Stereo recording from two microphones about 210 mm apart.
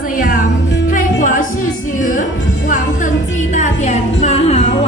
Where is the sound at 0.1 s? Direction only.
45° left (ahead or behind).